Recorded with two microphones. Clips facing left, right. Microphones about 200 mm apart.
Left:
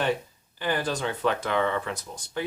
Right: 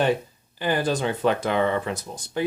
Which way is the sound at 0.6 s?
15° right (ahead or behind).